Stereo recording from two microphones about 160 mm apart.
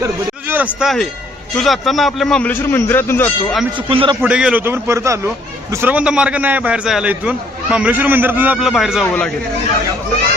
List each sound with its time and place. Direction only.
0.0 s speech: 10° right (ahead or behind); by 3.3 s 15° left (ahead or behind)
3.8 s a man's voice: 30° right (ahead or behind)
4.2 s a man's voice: 5° right (ahead or behind)
8.6 s a man's voice: centre (ahead or behind)